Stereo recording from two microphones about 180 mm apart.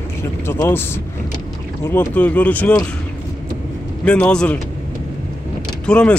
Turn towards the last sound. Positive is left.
turn(degrees=5)  # may be behind; listen again after turning